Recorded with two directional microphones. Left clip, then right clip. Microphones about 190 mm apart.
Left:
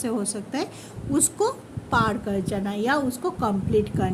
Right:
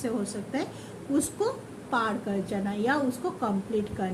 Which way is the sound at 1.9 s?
50° left (ahead or behind).